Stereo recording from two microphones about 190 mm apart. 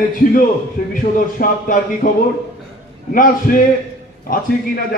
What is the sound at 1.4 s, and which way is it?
A man's voice, 50° left (ahead or behind).